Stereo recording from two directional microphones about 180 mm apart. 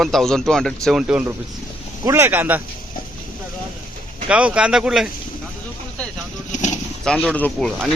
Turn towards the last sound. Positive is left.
turn(degrees=5)  # may be behind; listen again after turning